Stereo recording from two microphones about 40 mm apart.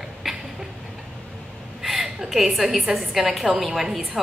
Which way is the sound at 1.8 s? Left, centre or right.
Centre.